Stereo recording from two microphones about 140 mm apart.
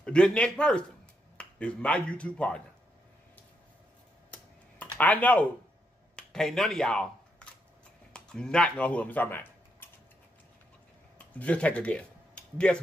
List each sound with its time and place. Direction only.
0.0 s speech: 5° left (ahead or behind)
4.3 s computer keyboard: 10° left (ahead or behind)
6.1 s a sound: 5° left (ahead or behind)
8.1 s speech: 5° left (ahead or behind)
11.3 s speech: 10° left (ahead or behind)